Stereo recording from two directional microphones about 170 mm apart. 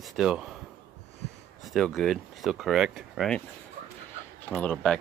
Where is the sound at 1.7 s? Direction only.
Centre (ahead or behind).